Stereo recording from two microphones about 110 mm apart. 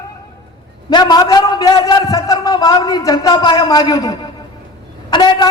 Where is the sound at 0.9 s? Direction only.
40° left (ahead or behind).